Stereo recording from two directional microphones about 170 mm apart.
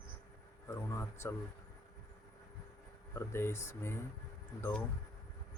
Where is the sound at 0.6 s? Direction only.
15° left (ahead or behind).